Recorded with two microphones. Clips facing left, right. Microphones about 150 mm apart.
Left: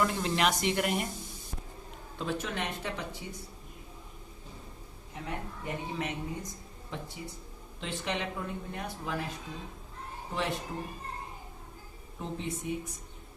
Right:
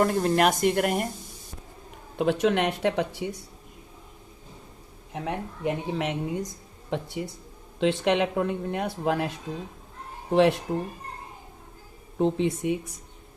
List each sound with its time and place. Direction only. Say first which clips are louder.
0.0 s speech: right 7 dB; 50° right (ahead or behind)
2.1 s speech: right 12 dB; 70° right (ahead or behind)
5.1 s speech: right 7 dB; 85° right; by 9.3 s 70° right (ahead or behind)
10.3 s speech: right 13 dB; 70° right (ahead or behind)
12.1 s speech: right 13 dB; 70° right (ahead or behind)